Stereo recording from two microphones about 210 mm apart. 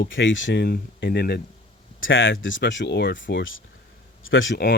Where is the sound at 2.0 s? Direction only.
65° left (ahead or behind).